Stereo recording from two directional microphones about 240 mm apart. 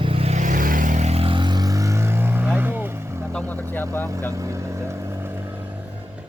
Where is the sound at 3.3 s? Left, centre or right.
Centre.